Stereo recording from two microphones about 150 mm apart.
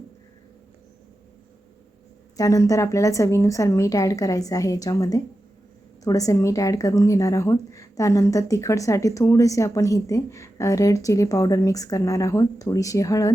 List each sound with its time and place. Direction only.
2.3 s a woman's voice: 20° left (ahead or behind)